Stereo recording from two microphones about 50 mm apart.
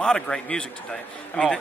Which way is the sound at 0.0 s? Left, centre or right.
Centre.